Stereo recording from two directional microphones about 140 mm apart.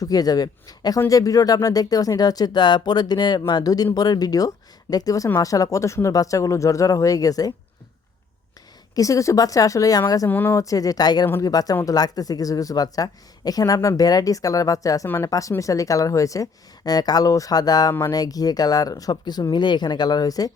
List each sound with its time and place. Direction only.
0.0 s speech: 25° left (ahead or behind)
9.0 s speech: 25° left (ahead or behind)
10.2 s speech: 15° left (ahead or behind)
11.3 s speech: 15° left (ahead or behind)